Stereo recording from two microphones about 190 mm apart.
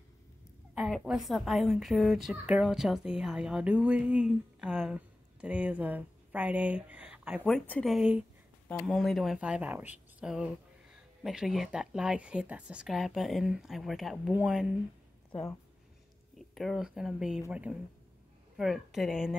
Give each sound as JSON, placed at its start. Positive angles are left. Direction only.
{"t": 0.7, "sound": "a woman's voice", "side_deg": 0}
{"t": 16.3, "sound": "a woman's voice", "side_deg": 0}